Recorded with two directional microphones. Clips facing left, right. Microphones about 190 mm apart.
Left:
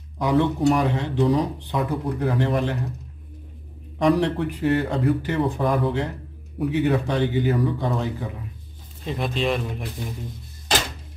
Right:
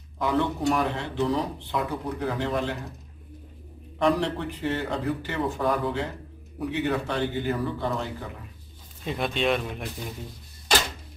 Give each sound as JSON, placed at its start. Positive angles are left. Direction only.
{"t": 0.2, "sound": "speech", "side_deg": 15}
{"t": 4.0, "sound": "speech", "side_deg": 10}
{"t": 9.0, "sound": "speech", "side_deg": 0}